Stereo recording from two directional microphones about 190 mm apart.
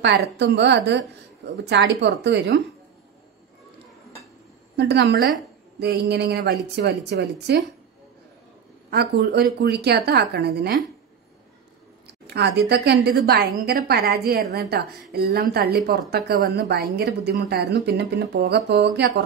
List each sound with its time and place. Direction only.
0.0 s a woman's voice: 65° right (ahead or behind)
4.7 s a woman's voice: 65° right (ahead or behind)
8.9 s a woman's voice: 60° right (ahead or behind)
12.4 s a woman's voice: 60° right (ahead or behind)